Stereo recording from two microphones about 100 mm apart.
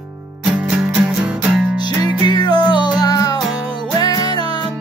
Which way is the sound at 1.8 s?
45° left (ahead or behind).